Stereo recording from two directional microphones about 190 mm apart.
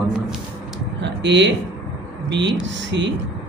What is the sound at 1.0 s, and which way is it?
Speech, 70° right (ahead or behind).